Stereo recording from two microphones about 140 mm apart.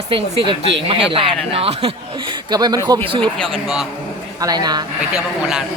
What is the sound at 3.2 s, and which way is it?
Speech, 5° left (ahead or behind).